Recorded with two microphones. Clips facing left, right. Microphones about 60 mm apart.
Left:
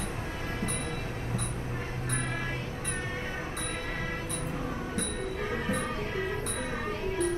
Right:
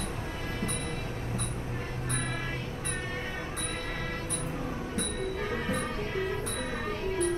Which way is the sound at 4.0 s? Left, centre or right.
Centre.